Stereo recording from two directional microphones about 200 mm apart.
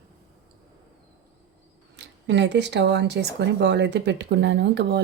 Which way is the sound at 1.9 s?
60° right (ahead or behind).